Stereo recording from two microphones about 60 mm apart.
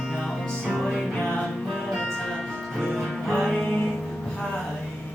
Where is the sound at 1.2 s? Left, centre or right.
Centre.